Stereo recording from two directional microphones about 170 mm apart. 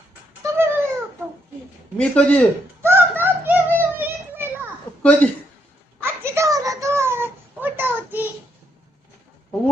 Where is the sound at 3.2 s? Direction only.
10° right (ahead or behind).